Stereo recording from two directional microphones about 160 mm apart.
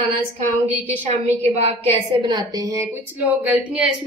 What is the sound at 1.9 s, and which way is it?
Speech, 30° right (ahead or behind).